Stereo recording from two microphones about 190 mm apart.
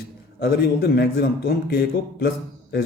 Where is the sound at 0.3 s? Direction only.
55° left (ahead or behind).